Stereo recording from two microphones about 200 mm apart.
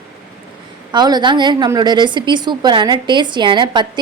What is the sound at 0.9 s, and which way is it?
A woman's voice, 20° right (ahead or behind).